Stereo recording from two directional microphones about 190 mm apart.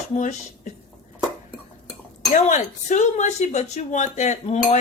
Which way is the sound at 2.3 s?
40° left (ahead or behind).